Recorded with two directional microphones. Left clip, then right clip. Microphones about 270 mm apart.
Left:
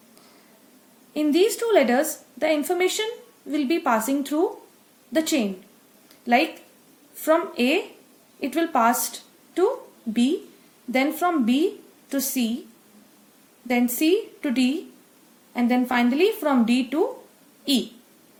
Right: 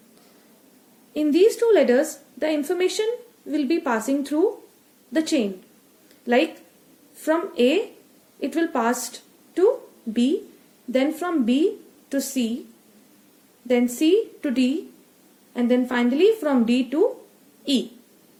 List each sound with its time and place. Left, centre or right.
1.1 s a woman's voice: centre
13.7 s a woman's voice: centre